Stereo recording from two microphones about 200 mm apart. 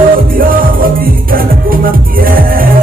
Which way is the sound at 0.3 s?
45° right (ahead or behind).